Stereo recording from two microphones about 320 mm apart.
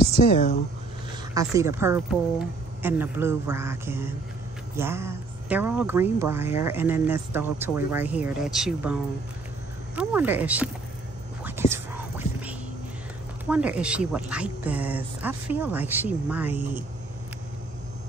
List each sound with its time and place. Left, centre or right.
0.2 s speech: left
1.3 s speech: centre
9.9 s speech: centre
11.7 s whispering: centre
13.5 s speech: centre